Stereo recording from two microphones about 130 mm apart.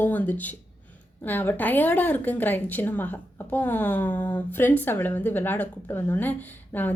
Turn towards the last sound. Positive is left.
turn(degrees=15)  # may be behind; listen again after turning